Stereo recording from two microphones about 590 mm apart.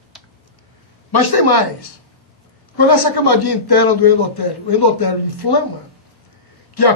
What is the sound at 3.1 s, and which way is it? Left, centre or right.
A man's voice, left.